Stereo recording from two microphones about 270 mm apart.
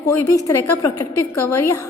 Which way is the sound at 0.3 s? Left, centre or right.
Centre.